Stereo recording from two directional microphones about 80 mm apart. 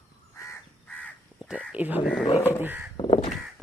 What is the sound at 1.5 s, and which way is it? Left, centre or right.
Speech, centre.